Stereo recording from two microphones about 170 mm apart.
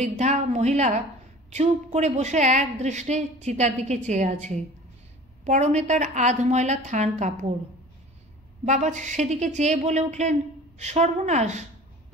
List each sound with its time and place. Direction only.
0.0 s a woman's voice: 40° right (ahead or behind)
8.6 s a woman's voice: 45° right (ahead or behind)